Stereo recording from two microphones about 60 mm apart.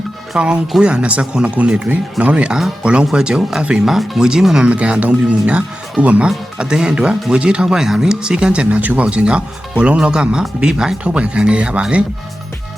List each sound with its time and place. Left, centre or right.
0.3 s speech: centre
4.7 s speech: right
6.2 s speech: centre